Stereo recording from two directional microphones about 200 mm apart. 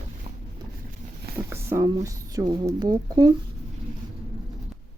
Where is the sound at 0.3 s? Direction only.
35° right (ahead or behind).